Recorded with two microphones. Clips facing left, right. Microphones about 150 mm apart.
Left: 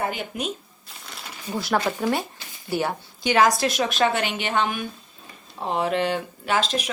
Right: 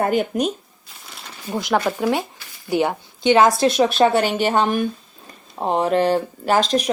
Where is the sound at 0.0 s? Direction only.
45° right (ahead or behind).